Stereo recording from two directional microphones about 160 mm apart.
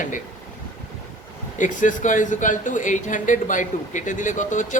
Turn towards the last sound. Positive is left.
turn(degrees=50)  # may be behind; listen again after turning